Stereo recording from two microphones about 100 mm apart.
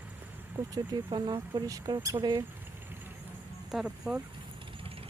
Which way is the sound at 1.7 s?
40° right (ahead or behind).